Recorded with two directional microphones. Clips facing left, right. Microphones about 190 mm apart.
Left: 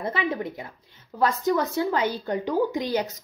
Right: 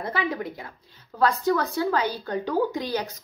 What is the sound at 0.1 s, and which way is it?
A woman's voice, 20° left (ahead or behind).